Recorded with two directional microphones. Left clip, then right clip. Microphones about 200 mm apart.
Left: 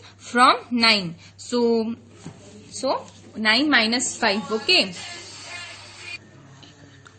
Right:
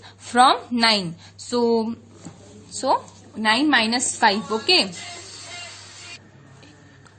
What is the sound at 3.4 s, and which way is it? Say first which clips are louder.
A woman's voice: even; 30° right (ahead or behind).